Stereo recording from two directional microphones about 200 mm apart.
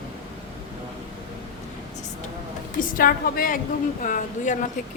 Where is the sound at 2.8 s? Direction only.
45° left (ahead or behind).